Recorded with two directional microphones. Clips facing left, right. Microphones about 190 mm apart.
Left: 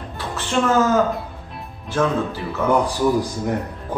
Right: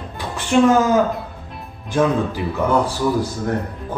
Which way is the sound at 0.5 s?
15° right (ahead or behind).